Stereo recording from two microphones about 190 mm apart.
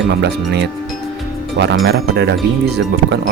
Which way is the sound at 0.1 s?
65° right (ahead or behind).